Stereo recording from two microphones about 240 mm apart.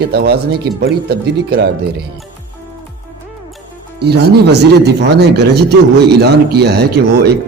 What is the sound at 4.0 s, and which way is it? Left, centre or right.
Speech, right.